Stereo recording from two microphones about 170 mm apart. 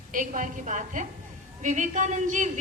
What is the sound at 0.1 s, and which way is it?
A woman's voice, 50° right (ahead or behind).